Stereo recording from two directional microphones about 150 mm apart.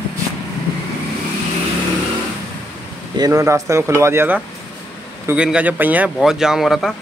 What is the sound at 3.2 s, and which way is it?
Speech, 20° right (ahead or behind).